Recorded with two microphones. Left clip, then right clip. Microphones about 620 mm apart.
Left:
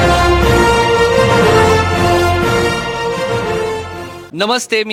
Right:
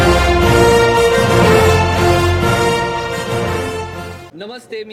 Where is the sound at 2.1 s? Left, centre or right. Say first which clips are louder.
Left 2 dB; centre.